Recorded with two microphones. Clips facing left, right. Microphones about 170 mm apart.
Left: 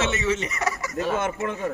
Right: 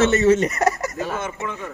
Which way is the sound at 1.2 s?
55° left (ahead or behind).